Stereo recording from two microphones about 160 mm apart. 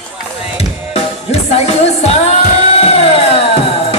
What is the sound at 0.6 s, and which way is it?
Music, 40° left (ahead or behind).